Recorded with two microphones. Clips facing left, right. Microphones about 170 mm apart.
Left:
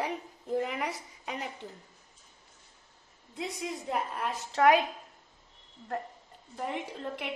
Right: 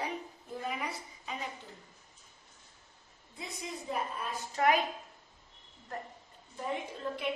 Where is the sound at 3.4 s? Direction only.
75° left (ahead or behind).